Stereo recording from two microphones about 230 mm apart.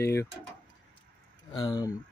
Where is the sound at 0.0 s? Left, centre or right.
Centre.